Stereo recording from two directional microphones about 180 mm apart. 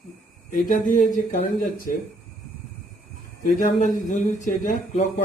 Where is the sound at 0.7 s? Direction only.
45° left (ahead or behind).